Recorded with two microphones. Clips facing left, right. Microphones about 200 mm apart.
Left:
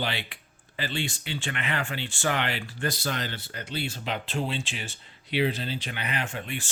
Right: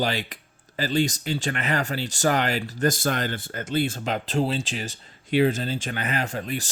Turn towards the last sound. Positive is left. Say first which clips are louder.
# right 5 dB
turn(degrees=-40)  # may be behind; listen again after turning